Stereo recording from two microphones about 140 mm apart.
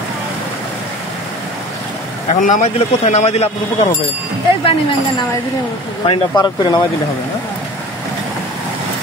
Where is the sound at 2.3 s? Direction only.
60° left (ahead or behind).